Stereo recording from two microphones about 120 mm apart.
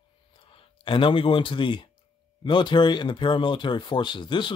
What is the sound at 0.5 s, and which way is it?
Speech, 45° left (ahead or behind).